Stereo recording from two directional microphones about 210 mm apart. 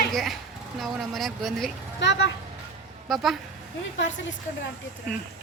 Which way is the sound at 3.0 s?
Centre (ahead or behind).